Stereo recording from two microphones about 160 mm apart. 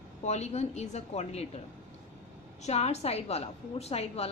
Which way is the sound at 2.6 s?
40° left (ahead or behind).